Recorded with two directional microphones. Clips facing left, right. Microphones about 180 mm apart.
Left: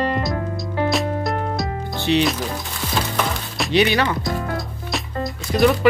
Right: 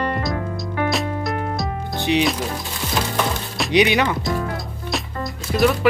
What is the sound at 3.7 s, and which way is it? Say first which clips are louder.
Speech: right 1 dB; 15° right (ahead or behind).